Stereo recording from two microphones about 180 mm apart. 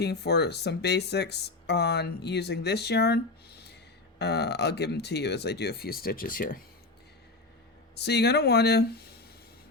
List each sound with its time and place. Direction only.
0.0 s speech: 65° left (ahead or behind)
4.2 s speech: 65° left (ahead or behind); by 6.6 s 50° left (ahead or behind)
7.9 s speech: 65° left (ahead or behind)